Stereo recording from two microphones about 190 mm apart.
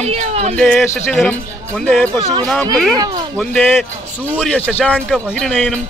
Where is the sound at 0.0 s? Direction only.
35° right (ahead or behind).